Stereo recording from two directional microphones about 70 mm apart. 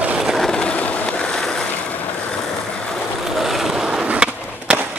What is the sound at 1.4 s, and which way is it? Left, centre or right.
Boat, centre.